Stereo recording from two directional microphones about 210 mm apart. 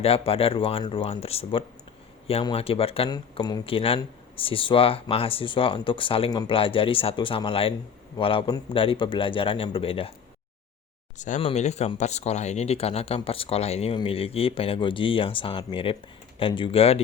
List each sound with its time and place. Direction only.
0.0 s speech: 30° left (ahead or behind)
11.2 s speech: 30° left (ahead or behind)